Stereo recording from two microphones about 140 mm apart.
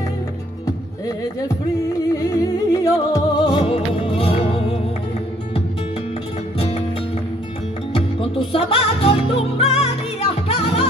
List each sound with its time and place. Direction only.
2.1 s music: 25° left (ahead or behind); by 4.6 s 45° left (ahead or behind)
7.9 s music: 40° left (ahead or behind)